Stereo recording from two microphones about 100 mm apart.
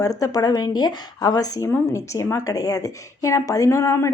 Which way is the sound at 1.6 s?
25° left (ahead or behind).